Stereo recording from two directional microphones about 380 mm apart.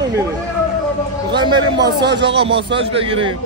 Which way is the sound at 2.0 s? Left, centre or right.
Right.